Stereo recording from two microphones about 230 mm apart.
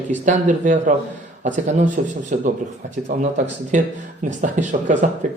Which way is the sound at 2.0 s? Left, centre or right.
Right.